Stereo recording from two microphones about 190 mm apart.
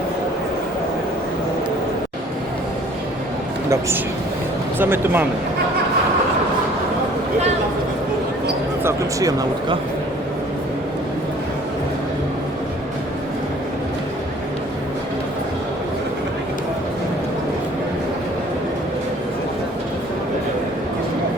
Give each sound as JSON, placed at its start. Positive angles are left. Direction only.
{"t": 4.8, "sound": "speech", "side_deg": -10}
{"t": 8.8, "sound": "speech", "side_deg": -15}